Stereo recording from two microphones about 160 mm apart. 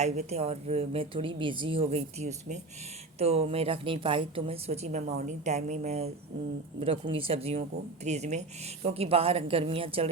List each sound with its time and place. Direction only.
0.0 s a woman's voice: 45° right (ahead or behind)